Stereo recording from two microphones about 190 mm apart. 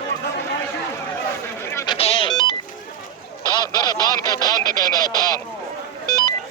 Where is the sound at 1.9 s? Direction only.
30° left (ahead or behind).